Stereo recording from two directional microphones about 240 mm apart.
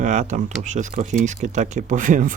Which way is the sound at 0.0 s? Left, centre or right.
Right.